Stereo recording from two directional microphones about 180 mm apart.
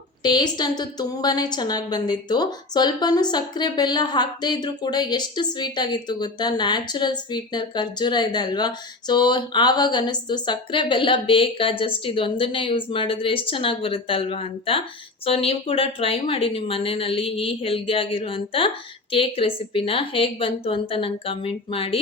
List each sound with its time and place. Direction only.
0.2 s a woman's voice: 25° left (ahead or behind)